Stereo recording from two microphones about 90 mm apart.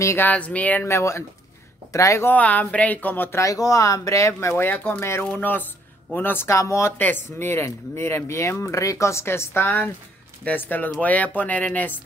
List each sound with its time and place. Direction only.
0.0 s speech: 30° left (ahead or behind)
0.3 s speech: 15° left (ahead or behind)
0.8 s speech: 30° left (ahead or behind)
2.3 s speech: 15° left (ahead or behind)
3.3 s speech: 40° left (ahead or behind)
7.0 s speech: 20° left (ahead or behind)